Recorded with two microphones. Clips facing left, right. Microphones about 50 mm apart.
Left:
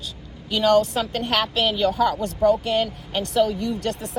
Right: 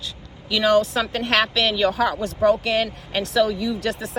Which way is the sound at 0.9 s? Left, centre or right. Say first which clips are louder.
Right 2 dB; right.